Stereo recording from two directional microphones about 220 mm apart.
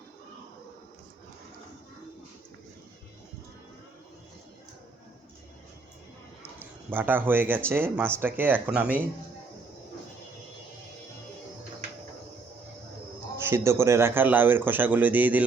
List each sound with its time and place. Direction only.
6.6 s speech: 10° right (ahead or behind)
13.4 s speech: 10° right (ahead or behind)